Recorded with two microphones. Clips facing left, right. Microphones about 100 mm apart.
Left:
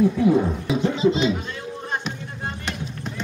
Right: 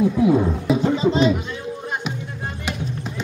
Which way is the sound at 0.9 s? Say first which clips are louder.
Even; 40° right (ahead or behind).